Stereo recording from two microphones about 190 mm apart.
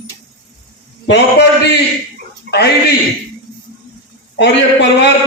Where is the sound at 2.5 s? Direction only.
45° right (ahead or behind).